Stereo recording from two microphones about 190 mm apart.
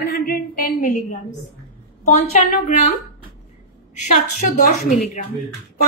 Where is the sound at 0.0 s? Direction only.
50° left (ahead or behind).